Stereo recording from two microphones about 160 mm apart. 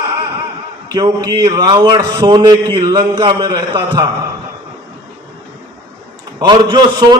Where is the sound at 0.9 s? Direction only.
25° right (ahead or behind).